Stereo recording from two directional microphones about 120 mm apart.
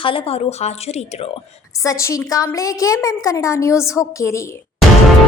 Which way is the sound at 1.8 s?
25° left (ahead or behind).